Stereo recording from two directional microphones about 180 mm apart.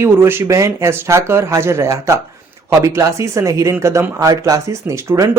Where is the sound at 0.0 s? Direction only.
15° right (ahead or behind).